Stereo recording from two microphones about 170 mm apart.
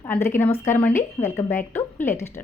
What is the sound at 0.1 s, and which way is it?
Speech, 15° left (ahead or behind).